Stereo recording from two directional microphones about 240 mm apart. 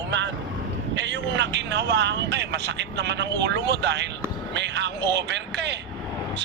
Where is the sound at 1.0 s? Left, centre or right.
Right.